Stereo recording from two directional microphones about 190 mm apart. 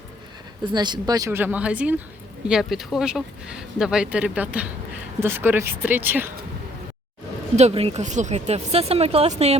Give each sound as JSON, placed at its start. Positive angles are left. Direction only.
{"t": 0.6, "sound": "speech", "side_deg": -25}
{"t": 7.5, "sound": "speech", "side_deg": -35}